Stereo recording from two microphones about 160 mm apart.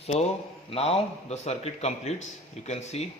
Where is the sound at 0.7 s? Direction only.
40° left (ahead or behind).